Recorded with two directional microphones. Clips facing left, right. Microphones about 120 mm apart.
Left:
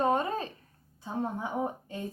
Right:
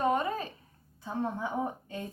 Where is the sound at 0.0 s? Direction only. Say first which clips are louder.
Left 1 dB; 25° left (ahead or behind).